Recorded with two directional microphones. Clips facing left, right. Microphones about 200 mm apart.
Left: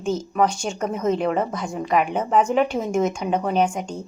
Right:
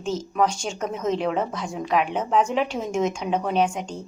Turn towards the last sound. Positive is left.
turn(degrees=5)  # may be behind; listen again after turning